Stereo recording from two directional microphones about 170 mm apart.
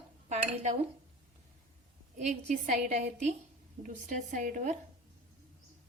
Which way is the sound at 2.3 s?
40° right (ahead or behind).